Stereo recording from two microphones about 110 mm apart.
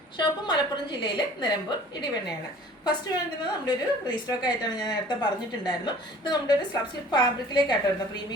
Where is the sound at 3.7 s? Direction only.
40° left (ahead or behind).